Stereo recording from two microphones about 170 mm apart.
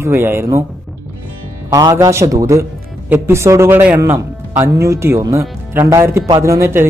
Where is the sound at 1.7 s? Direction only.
20° right (ahead or behind).